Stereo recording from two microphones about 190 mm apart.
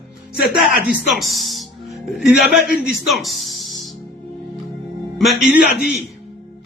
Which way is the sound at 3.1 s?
Centre (ahead or behind).